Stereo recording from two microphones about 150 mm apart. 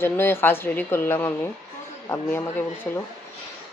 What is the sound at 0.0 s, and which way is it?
Speech, 15° left (ahead or behind).